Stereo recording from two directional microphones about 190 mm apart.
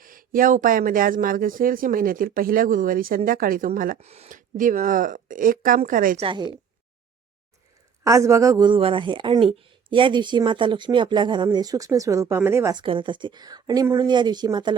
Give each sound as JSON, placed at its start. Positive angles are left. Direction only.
{"t": 0.0, "sound": "speech", "side_deg": -45}
{"t": 4.0, "sound": "speech", "side_deg": -35}
{"t": 6.2, "sound": "a woman's voice", "side_deg": -25}
{"t": 8.0, "sound": "a woman's voice", "side_deg": -15}
{"t": 12.8, "sound": "a woman's voice", "side_deg": -25}